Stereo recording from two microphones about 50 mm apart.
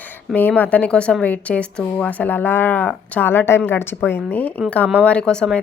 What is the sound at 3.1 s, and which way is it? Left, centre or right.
A woman's voice, left.